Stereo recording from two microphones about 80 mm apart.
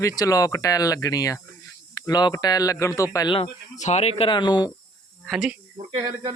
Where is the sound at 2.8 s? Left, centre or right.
Left.